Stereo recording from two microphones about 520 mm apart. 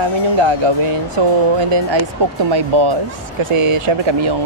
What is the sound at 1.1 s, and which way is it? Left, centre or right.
Speech, right.